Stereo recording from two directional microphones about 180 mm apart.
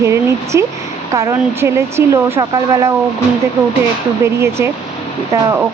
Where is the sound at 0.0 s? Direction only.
15° right (ahead or behind).